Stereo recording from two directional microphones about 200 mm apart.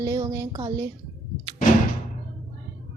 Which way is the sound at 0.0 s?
15° right (ahead or behind).